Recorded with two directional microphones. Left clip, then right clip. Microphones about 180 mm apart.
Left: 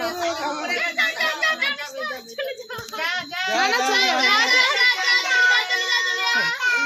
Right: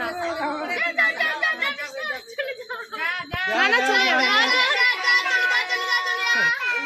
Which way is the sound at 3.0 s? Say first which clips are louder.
Left 1 dB; 70° left (ahead or behind).